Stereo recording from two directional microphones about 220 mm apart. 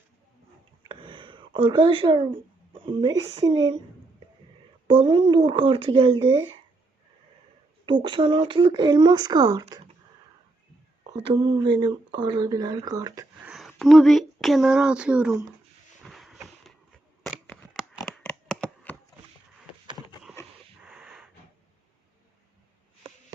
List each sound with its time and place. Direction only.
0.9 s a sound: 20° right (ahead or behind)
3.3 s speech: 20° right (ahead or behind)
4.9 s speech: 25° right (ahead or behind)
7.9 s speech: 20° right (ahead or behind)
11.2 s speech: 20° right (ahead or behind)
13.5 s speech: centre (ahead or behind)
16.0 s a sound: centre (ahead or behind)
18.0 s shuffling cards: 5° left (ahead or behind)
20.8 s wheeze: 5° right (ahead or behind)